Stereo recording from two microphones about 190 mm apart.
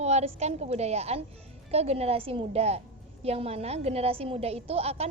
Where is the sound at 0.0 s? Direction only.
35° right (ahead or behind).